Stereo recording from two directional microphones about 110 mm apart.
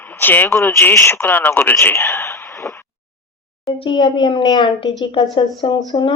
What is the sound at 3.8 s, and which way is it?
Speech, 40° left (ahead or behind).